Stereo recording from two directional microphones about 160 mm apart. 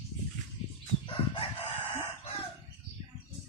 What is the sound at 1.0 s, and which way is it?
Crowing, 35° left (ahead or behind).